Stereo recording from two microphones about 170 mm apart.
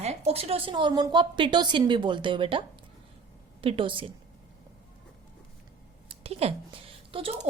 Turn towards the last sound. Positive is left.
turn(degrees=-35)  # may be behind; listen again after turning